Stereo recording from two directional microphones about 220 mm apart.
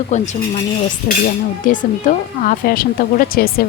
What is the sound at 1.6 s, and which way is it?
Speech, 35° left (ahead or behind).